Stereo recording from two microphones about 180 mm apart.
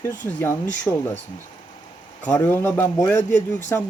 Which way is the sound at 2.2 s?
10° left (ahead or behind).